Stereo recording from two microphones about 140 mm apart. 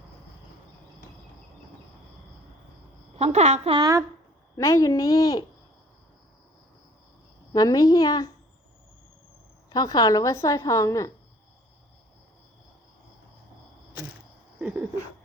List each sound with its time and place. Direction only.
3.2 s a woman's voice: 50° right (ahead or behind)
4.5 s a woman's voice: 20° left (ahead or behind)
7.5 s a woman's voice: 25° left (ahead or behind)
9.6 s a woman's voice: 30° left (ahead or behind)
14.6 s a sound: 10° right (ahead or behind)